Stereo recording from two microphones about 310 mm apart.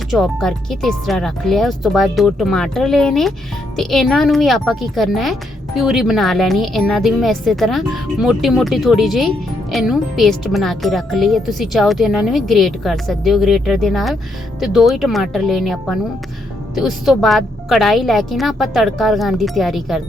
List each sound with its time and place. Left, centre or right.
0.1 s a woman's voice: centre